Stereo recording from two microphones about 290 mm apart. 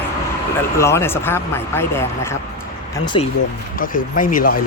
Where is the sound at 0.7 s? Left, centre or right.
Centre.